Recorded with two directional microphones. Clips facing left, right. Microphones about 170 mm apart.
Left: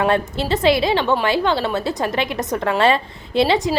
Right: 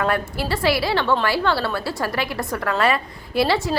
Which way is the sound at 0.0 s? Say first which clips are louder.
Left 4 dB; 20° left (ahead or behind).